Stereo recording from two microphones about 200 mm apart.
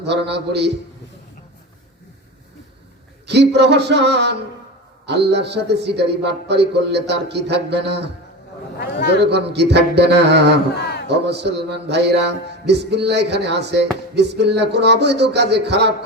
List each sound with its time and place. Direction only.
0.0 s speech: 60° right (ahead or behind)
3.2 s speech: 55° right (ahead or behind)
8.8 s a man's voice: 55° left (ahead or behind)
9.1 s speech: 60° right (ahead or behind)